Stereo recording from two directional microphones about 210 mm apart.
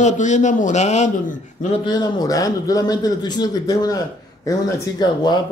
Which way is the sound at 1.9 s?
20° left (ahead or behind).